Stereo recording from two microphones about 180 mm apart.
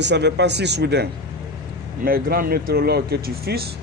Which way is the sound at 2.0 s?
55° right (ahead or behind).